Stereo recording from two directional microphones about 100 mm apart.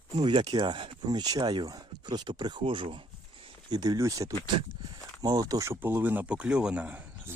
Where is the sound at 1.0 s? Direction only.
40° right (ahead or behind).